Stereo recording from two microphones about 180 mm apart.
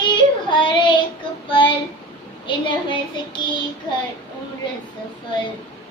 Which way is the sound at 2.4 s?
25° left (ahead or behind).